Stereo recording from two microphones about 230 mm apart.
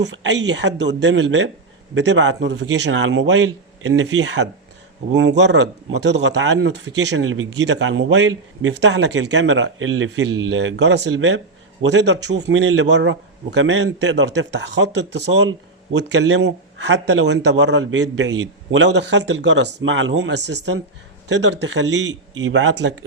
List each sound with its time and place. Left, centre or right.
0.0 s a man's voice: right